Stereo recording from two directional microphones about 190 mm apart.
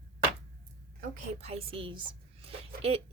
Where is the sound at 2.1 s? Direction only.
30° right (ahead or behind).